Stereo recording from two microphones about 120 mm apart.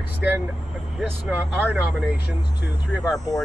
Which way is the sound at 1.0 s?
5° right (ahead or behind).